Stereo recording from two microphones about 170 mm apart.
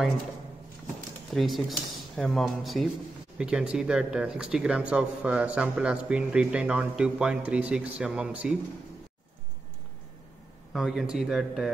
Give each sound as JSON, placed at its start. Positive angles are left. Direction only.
{"t": 1.3, "sound": "speech", "side_deg": 0}
{"t": 10.7, "sound": "speech", "side_deg": -5}